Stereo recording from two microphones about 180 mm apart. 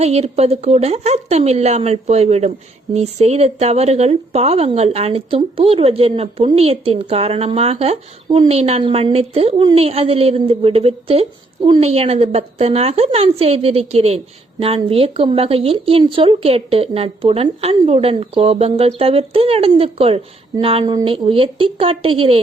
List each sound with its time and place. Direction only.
0.0 s a woman's voice: 35° right (ahead or behind)